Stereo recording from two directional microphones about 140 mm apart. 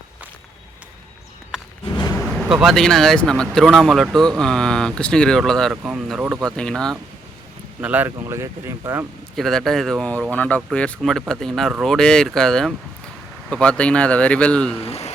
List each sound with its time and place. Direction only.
2.4 s speech: 5° right (ahead or behind)
5.7 s speech: 10° right (ahead or behind)
6.4 s speech: 5° left (ahead or behind)
7.8 s speech: 10° right (ahead or behind)
9.3 s speech: centre (ahead or behind)
14.8 s speech: 50° left (ahead or behind)